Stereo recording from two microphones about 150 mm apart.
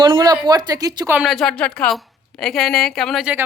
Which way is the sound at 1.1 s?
5° right (ahead or behind).